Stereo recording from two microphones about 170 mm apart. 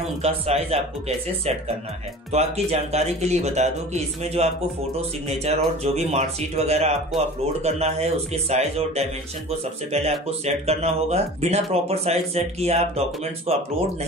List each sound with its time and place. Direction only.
0.2 s speech: 35° right (ahead or behind)
10.4 s speech: 40° right (ahead or behind)